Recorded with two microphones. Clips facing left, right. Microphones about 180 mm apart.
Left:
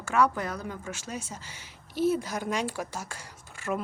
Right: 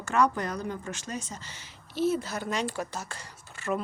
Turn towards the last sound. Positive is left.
turn(degrees=10)  # may be behind; listen again after turning